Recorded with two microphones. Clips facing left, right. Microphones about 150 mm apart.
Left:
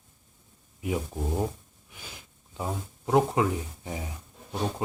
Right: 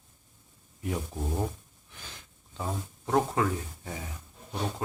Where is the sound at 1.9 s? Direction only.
10° left (ahead or behind).